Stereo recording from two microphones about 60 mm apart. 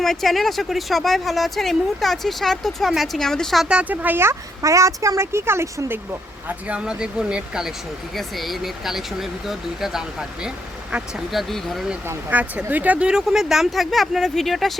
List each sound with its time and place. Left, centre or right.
0.0 s speech: centre
3.2 s a woman's voice: centre
3.7 s speech: right
4.6 s speech: right
6.7 s speech: centre
8.1 s speech: centre
12.3 s speech: right
13.1 s speech: centre